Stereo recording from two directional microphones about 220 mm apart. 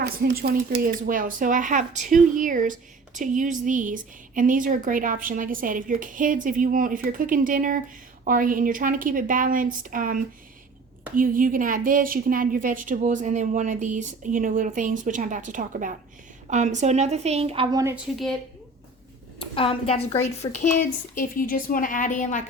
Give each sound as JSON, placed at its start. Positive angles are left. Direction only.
{"t": 0.0, "sound": "a woman's voice", "side_deg": -50}
{"t": 17.9, "sound": "a woman's voice", "side_deg": 0}
{"t": 19.4, "sound": "a woman's voice", "side_deg": 25}